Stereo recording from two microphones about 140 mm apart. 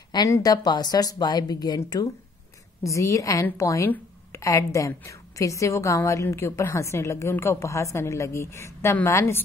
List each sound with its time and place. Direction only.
0.1 s a woman's voice: 25° left (ahead or behind)